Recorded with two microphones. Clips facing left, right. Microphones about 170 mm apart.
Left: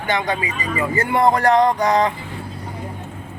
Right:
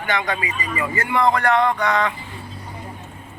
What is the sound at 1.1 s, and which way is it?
A man's voice, 40° left (ahead or behind).